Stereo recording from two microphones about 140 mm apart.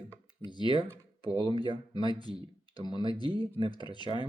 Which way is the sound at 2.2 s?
30° left (ahead or behind).